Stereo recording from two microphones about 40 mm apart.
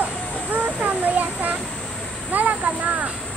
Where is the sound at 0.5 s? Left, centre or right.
Right.